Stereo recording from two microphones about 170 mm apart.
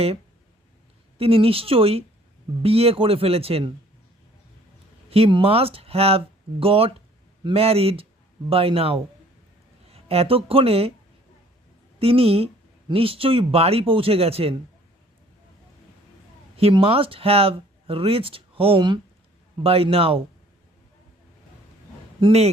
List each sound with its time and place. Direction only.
1.2 s speech: 35° right (ahead or behind)
5.1 s a woman's voice: 35° right (ahead or behind)
11.9 s speech: 35° right (ahead or behind)
16.6 s speech: 35° right (ahead or behind)
22.2 s speech: 40° right (ahead or behind)